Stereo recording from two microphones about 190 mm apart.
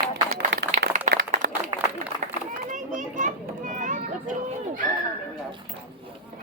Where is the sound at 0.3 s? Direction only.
65° right (ahead or behind).